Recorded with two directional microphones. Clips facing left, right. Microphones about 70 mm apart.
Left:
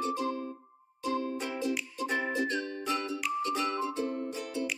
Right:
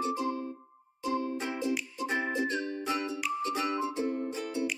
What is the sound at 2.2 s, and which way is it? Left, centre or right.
Music, centre.